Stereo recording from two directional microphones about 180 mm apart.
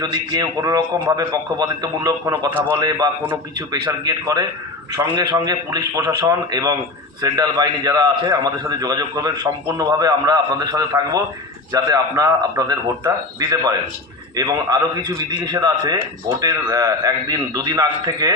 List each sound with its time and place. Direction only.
0.0 s a man's voice: 20° right (ahead or behind)